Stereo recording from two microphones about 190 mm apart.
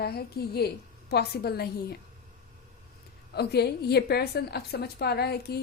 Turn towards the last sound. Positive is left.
turn(degrees=55)  # may be behind; listen again after turning